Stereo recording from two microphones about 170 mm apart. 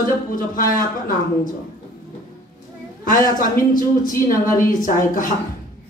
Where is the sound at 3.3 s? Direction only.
55° left (ahead or behind).